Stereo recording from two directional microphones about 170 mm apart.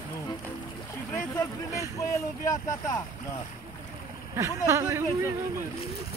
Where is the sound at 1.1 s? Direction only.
20° left (ahead or behind).